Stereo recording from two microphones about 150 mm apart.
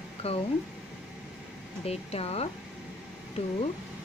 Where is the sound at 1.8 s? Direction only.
45° left (ahead or behind).